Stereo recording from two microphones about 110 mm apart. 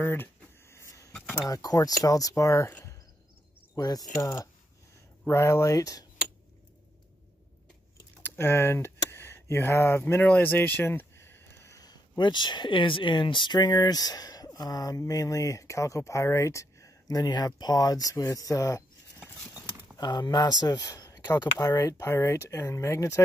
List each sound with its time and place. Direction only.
0.0 s a sound: 20° left (ahead or behind)
1.1 s a sound: 10° left (ahead or behind)
1.5 s speech: 35° left (ahead or behind)
3.7 s speech: 35° left (ahead or behind)
8.2 s speech: 20° left (ahead or behind)
19.1 s scissors: 20° left (ahead or behind)
20.0 s speech: 40° left (ahead or behind)
20.6 s a sound: 40° left (ahead or behind)
21.5 s speech: 30° left (ahead or behind)